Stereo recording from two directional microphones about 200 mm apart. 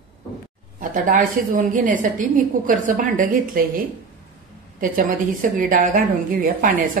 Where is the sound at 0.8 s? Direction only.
40° right (ahead or behind).